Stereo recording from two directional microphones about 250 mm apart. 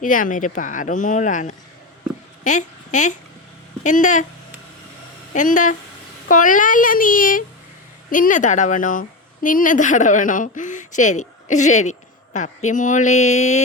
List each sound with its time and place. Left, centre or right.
0.0 s a woman's voice: left
5.3 s a woman's voice: left